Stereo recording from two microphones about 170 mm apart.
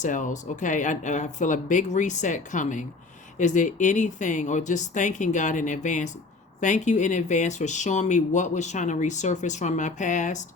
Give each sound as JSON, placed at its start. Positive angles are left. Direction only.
{"t": 0.0, "sound": "speech", "side_deg": 50}